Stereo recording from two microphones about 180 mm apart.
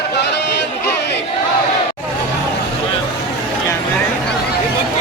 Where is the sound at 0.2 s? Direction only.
70° left (ahead or behind).